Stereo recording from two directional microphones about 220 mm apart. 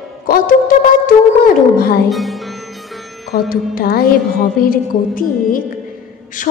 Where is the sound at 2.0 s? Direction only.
Centre (ahead or behind).